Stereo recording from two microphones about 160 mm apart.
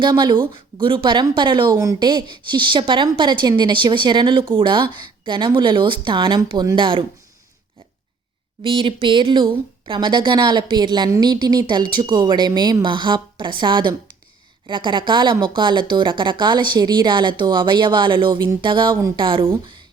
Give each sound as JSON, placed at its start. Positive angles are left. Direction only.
{"t": 0.0, "sound": "a woman's voice", "side_deg": -30}
{"t": 8.6, "sound": "a woman's voice", "side_deg": -35}